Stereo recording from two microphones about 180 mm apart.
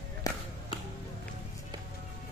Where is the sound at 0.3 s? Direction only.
20° left (ahead or behind).